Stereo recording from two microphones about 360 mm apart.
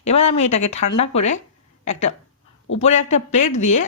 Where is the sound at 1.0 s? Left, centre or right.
Centre.